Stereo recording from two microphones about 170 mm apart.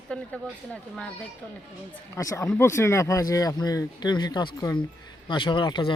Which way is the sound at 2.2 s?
20° left (ahead or behind).